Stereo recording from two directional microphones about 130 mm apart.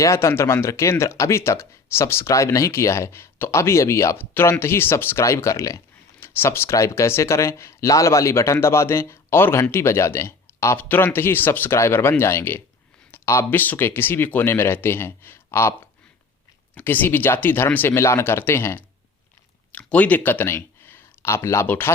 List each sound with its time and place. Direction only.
0.0 s speech: 20° left (ahead or behind)
16.7 s speech: 15° left (ahead or behind)